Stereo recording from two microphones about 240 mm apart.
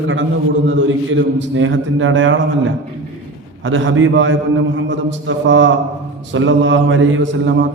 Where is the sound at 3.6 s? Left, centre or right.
Right.